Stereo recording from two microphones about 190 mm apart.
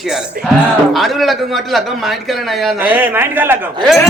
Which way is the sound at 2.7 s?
10° right (ahead or behind).